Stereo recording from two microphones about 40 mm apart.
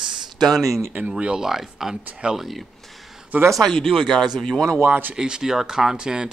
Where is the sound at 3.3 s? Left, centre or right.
Right.